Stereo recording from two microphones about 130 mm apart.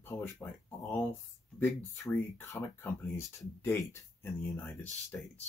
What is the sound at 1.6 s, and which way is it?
Speech, 15° left (ahead or behind).